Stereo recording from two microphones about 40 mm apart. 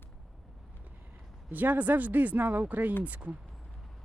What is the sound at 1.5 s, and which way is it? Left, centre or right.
Speech, right.